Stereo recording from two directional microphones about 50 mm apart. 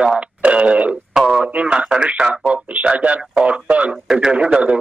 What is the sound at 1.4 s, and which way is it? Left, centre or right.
A man's voice, right.